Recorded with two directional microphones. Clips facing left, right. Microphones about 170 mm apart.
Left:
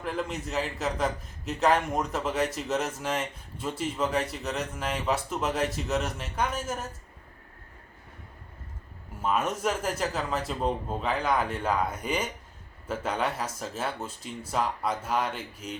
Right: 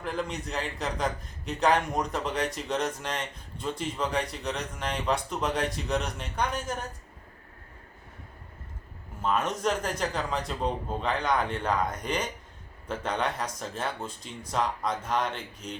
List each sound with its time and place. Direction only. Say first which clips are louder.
0.0 s a man's voice: even; centre (ahead or behind)
9.2 s a man's voice: even; 10° left (ahead or behind)